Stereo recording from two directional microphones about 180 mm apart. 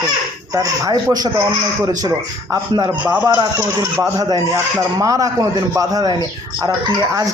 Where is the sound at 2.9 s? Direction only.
10° right (ahead or behind).